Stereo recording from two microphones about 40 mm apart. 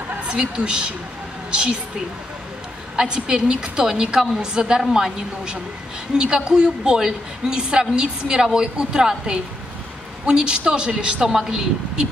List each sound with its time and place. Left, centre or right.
0.3 s a woman's voice: right
3.0 s a woman's voice: centre